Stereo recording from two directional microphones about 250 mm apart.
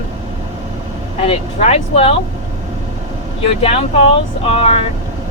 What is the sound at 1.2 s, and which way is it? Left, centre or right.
Speech, left.